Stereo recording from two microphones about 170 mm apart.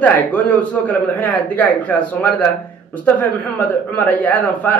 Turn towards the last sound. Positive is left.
turn(degrees=10)  # may be behind; listen again after turning